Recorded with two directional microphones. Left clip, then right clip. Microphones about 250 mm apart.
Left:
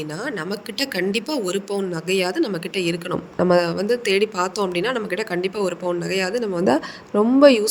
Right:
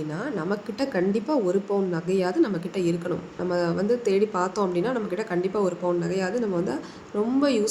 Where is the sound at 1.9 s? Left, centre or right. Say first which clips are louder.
Left 3 dB; left.